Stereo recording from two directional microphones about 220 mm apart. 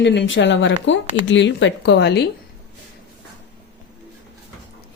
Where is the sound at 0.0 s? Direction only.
55° left (ahead or behind).